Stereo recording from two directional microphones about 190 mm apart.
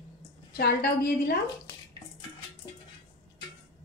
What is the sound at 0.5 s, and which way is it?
Speech, 55° left (ahead or behind).